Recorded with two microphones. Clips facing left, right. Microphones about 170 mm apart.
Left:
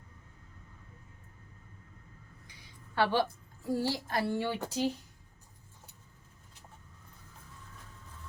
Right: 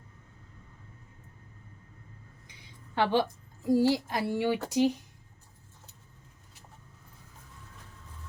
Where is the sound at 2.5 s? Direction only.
20° right (ahead or behind).